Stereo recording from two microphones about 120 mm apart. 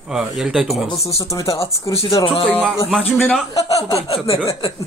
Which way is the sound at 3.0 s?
15° left (ahead or behind).